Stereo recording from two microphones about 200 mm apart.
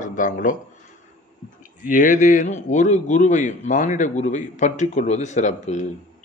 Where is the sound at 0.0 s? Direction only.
40° left (ahead or behind).